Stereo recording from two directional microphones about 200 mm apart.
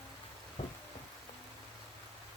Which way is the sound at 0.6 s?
30° left (ahead or behind).